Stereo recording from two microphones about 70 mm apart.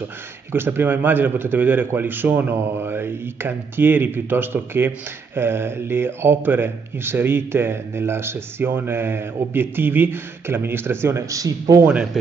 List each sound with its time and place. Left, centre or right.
0.5 s a man's voice: right
11.2 s a man's voice: right
11.8 s speech: centre